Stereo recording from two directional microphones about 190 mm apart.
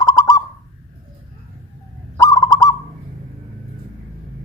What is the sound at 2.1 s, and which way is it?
Bird, 20° left (ahead or behind).